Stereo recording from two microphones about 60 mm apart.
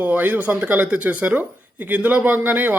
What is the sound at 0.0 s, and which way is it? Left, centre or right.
Speech, right.